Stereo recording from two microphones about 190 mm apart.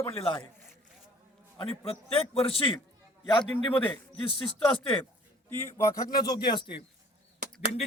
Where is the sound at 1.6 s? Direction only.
30° left (ahead or behind).